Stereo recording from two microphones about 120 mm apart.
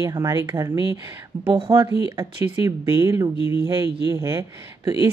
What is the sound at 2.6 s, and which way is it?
Speech, 25° right (ahead or behind).